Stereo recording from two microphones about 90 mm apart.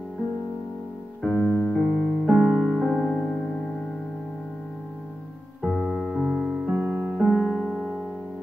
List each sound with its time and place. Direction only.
1.2 s music: 5° right (ahead or behind)
3.0 s music: 10° left (ahead or behind)
5.6 s music: centre (ahead or behind)
6.7 s music: 20° right (ahead or behind)
7.2 s music: 5° right (ahead or behind)